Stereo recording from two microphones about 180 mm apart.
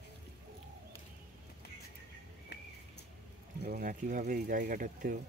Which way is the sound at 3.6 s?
55° right (ahead or behind).